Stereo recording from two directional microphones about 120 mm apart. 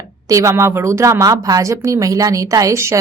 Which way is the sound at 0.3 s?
25° right (ahead or behind).